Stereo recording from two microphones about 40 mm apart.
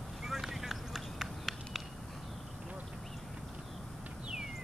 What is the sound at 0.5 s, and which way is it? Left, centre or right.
Run, centre.